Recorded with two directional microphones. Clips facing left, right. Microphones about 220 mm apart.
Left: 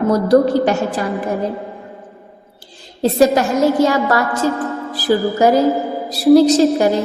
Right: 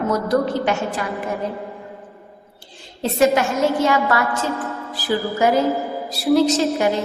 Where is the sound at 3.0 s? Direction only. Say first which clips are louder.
Left 4 dB; 35° left (ahead or behind).